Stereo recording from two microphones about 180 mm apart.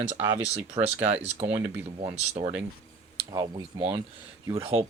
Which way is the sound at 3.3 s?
25° right (ahead or behind).